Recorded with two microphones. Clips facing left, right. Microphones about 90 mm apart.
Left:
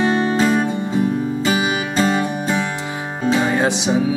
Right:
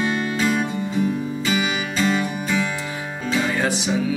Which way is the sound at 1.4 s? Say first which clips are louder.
Left 2 dB; 40° left (ahead or behind).